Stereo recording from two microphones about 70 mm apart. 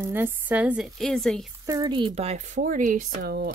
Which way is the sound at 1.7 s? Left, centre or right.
Right.